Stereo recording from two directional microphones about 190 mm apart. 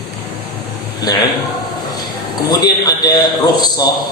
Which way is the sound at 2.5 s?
20° left (ahead or behind).